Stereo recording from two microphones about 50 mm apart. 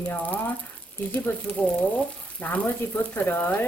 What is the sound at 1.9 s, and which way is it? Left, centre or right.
Frying, left.